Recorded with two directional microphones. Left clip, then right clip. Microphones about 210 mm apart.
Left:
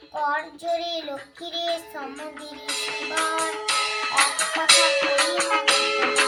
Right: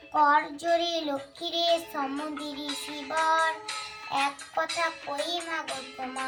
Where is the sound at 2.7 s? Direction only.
50° left (ahead or behind).